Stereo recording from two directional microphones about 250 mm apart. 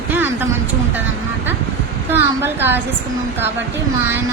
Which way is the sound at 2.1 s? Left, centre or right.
Centre.